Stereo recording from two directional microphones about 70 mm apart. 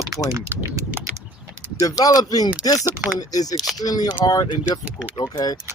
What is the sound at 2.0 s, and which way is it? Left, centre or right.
Speech, left.